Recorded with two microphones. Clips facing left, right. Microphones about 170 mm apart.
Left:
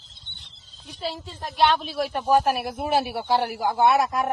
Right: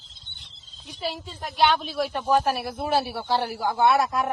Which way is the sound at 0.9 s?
Centre (ahead or behind).